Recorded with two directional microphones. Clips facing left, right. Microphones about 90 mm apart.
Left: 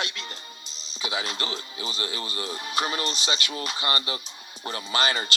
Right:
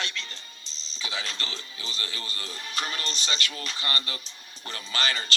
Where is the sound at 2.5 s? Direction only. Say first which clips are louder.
Left 5 dB; 40° left (ahead or behind).